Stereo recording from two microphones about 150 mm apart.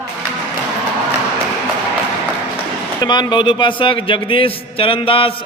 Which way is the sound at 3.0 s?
30° left (ahead or behind).